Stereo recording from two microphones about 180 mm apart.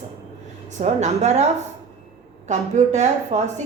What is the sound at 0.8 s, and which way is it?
Speech, 40° right (ahead or behind).